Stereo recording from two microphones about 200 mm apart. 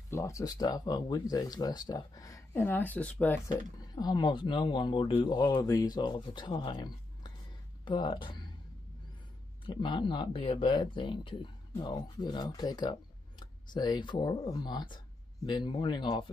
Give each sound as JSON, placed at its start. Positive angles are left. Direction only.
{"t": 0.1, "sound": "speech", "side_deg": 15}
{"t": 3.4, "sound": "speech", "side_deg": 20}
{"t": 9.7, "sound": "speech", "side_deg": 25}